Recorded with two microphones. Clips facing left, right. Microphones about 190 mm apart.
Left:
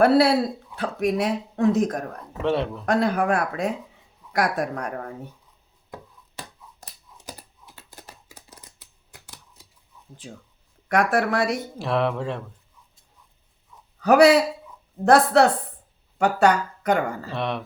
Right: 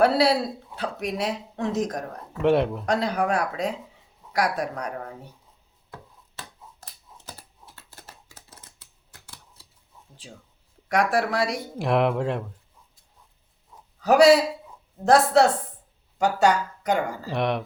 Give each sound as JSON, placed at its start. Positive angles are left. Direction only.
{"t": 0.0, "sound": "speech", "side_deg": 50}
{"t": 2.4, "sound": "speech", "side_deg": -15}
{"t": 2.8, "sound": "speech", "side_deg": 50}
{"t": 5.9, "sound": "finger snapping", "side_deg": 15}
{"t": 7.8, "sound": "scissors", "side_deg": 15}
{"t": 10.8, "sound": "speech", "side_deg": 55}
{"t": 11.8, "sound": "speech", "side_deg": -15}
{"t": 14.0, "sound": "speech", "side_deg": 60}
{"t": 17.3, "sound": "speech", "side_deg": -15}